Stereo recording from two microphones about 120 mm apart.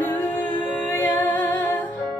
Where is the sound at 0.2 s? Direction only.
15° left (ahead or behind).